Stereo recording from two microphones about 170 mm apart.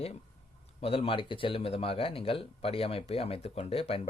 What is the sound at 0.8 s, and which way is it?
Speech, 35° left (ahead or behind).